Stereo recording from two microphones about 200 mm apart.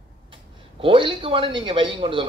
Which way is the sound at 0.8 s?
25° right (ahead or behind).